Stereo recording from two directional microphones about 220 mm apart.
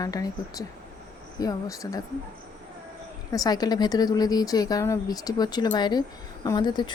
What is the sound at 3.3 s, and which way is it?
Speech, 15° left (ahead or behind).